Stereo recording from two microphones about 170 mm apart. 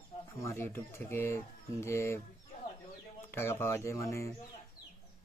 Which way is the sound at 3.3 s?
15° left (ahead or behind).